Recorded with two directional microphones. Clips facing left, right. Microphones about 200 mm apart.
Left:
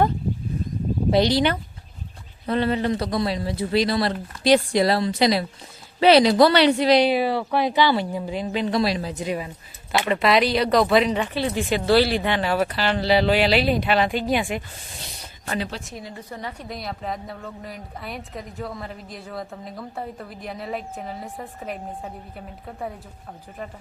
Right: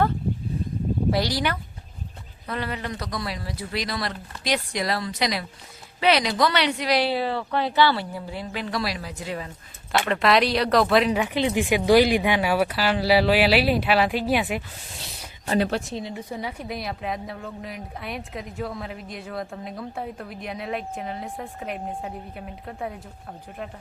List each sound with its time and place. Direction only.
1.1 s speech: 25° left (ahead or behind)
10.1 s a woman's voice: centre (ahead or behind)
11.3 s speech: 15° right (ahead or behind)
15.5 s speech: 50° right (ahead or behind)
15.8 s a woman's voice: 30° right (ahead or behind)
16.0 s a woman's voice: 15° right (ahead or behind)